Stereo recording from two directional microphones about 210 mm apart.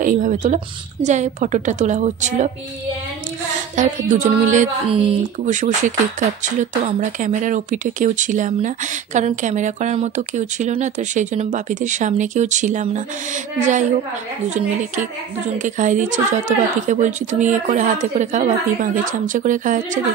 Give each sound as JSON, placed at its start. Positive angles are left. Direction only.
{"t": 0.0, "sound": "speech", "side_deg": -40}
{"t": 3.7, "sound": "speech", "side_deg": -35}